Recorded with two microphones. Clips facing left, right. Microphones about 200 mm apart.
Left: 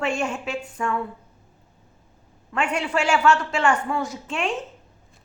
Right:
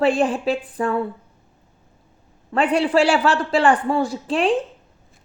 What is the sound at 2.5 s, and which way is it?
A woman's voice, 35° right (ahead or behind).